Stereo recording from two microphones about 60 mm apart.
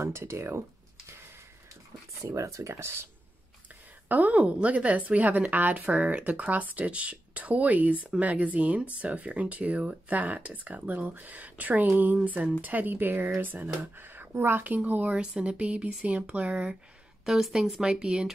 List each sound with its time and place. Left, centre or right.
0.0 s speech: right
2.3 s speech: right
4.1 s a woman's voice: right
17.2 s speech: centre